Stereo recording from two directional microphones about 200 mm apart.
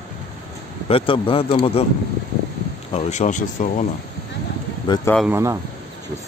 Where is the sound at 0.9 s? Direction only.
25° left (ahead or behind).